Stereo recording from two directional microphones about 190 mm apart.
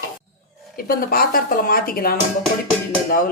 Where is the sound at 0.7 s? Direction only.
50° left (ahead or behind).